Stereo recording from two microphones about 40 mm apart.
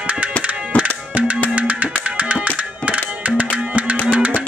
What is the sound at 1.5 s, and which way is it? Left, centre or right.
Music, right.